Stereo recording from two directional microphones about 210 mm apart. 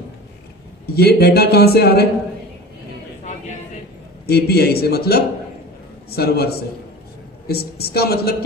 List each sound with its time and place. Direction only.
0.9 s speech: 50° left (ahead or behind)
4.3 s speech: 50° left (ahead or behind)